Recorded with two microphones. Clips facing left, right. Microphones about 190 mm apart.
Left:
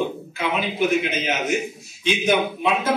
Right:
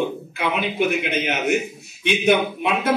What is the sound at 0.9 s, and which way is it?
A man's voice, 60° right (ahead or behind).